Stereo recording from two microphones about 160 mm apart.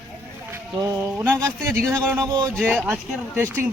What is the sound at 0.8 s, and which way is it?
Speech, 15° right (ahead or behind).